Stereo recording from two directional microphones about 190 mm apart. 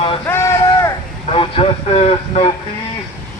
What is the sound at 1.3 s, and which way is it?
Vehicle, 30° left (ahead or behind).